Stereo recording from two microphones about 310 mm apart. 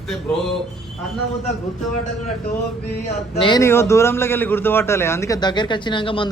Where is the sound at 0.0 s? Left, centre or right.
Centre.